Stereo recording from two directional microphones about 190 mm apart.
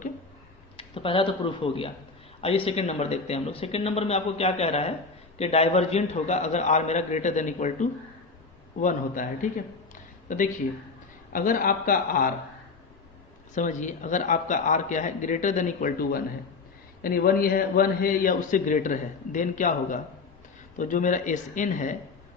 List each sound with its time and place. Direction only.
0.8 s speech: 30° left (ahead or behind)
9.9 s a sound: 45° left (ahead or behind)
11.3 s a man's voice: 45° left (ahead or behind)
13.6 s a man's voice: 40° left (ahead or behind)